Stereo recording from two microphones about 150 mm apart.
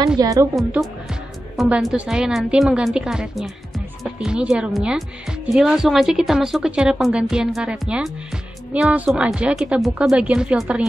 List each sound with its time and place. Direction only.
0.2 s a woman's voice: 25° right (ahead or behind)
0.6 s a woman's voice: centre (ahead or behind)